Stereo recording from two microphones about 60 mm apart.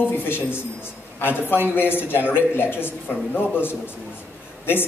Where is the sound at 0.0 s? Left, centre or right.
Left.